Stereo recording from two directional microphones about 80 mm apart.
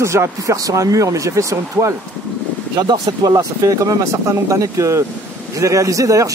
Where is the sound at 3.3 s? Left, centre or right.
Right.